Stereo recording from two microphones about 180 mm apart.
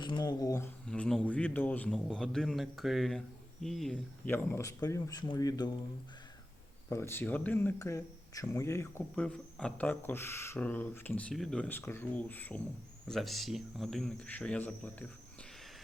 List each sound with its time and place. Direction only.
0.0 s a sound: 25° left (ahead or behind)
0.9 s a man's voice: 5° left (ahead or behind); by 5.7 s 20° left (ahead or behind)
6.9 s a man's voice: 15° left (ahead or behind)